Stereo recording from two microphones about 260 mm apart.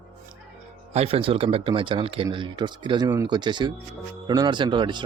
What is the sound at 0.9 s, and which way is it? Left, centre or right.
Speech, right.